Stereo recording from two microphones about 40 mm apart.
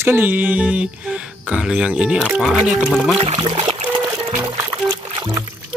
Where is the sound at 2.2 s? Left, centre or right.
Centre.